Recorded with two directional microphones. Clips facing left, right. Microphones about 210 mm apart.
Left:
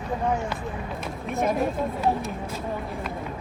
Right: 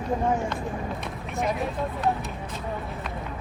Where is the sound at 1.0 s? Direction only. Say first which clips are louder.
Left 3 dB; centre (ahead or behind).